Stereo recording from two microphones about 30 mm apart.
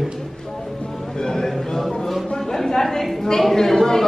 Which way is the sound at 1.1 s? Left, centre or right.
Centre.